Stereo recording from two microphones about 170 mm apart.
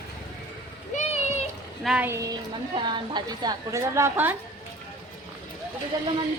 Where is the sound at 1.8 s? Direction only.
10° right (ahead or behind).